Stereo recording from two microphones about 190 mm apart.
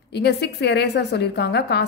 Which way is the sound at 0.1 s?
60° left (ahead or behind).